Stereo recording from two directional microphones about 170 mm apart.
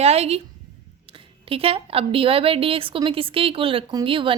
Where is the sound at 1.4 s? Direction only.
35° right (ahead or behind).